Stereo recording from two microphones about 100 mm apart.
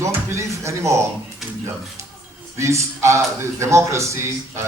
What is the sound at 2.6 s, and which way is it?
A man's voice, 30° right (ahead or behind).